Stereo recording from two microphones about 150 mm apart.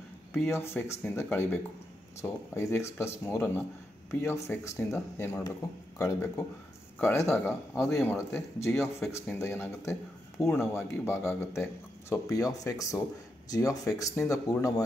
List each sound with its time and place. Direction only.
0.3 s speech: 15° left (ahead or behind)